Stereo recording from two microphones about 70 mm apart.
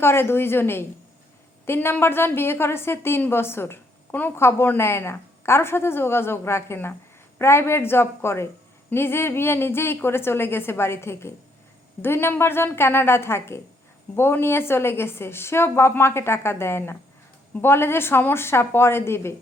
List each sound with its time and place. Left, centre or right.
0.0 s a woman's voice: left
4.4 s a woman's voice: left